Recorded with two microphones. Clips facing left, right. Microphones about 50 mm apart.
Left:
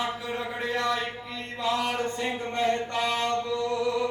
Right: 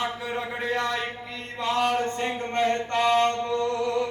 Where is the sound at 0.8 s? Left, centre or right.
Right.